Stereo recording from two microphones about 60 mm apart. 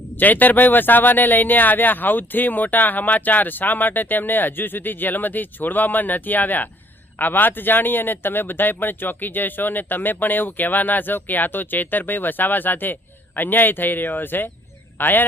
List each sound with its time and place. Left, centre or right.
0.2 s speech: left